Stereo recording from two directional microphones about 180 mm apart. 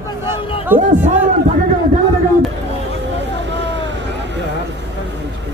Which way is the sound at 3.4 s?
80° right.